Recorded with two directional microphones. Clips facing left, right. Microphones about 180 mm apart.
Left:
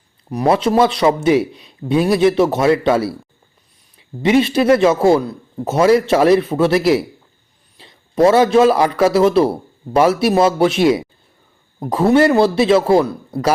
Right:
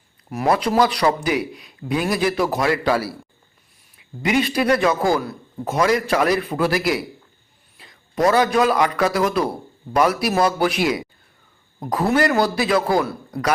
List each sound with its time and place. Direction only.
0.3 s a man's voice: 20° left (ahead or behind)
4.2 s a man's voice: 30° left (ahead or behind)